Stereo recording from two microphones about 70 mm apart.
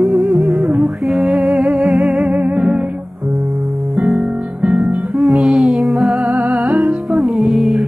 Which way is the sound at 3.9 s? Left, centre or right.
Centre.